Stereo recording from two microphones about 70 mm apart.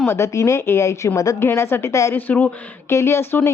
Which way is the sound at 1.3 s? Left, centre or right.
Left.